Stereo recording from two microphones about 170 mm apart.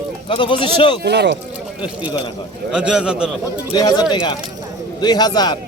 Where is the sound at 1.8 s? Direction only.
25° left (ahead or behind).